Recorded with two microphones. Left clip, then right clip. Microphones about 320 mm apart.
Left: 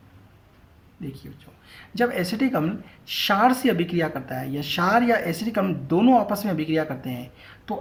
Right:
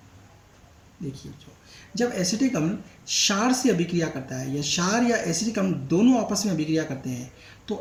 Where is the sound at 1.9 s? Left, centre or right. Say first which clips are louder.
Left 2 dB; left.